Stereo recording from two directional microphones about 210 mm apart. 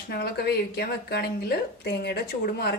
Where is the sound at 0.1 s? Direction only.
50° left (ahead or behind).